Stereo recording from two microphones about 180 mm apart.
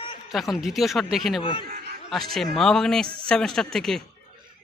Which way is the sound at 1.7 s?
55° right (ahead or behind).